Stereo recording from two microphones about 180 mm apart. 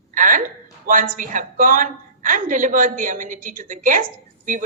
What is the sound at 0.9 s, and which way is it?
A woman's voice, 50° right (ahead or behind).